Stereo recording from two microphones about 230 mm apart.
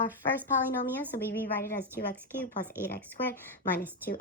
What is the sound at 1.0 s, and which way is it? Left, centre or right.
Speech, centre.